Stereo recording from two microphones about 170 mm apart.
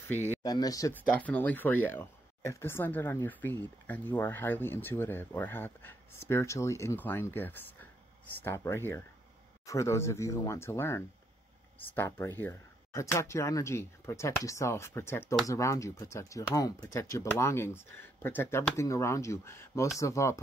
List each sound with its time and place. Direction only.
0.0 s speech: 10° left (ahead or behind)
0.4 s speech: 20° left (ahead or behind)
1.1 s speech: 10° left (ahead or behind)